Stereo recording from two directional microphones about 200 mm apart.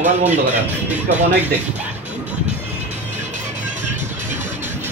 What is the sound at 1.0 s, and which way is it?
Speech, 35° right (ahead or behind).